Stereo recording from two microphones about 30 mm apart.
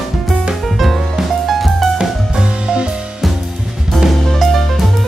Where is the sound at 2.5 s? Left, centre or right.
Right.